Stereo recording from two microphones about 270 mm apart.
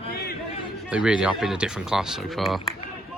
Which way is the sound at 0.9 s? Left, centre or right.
Centre.